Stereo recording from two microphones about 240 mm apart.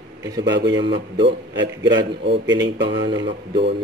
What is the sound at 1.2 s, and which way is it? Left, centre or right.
A man's voice, right.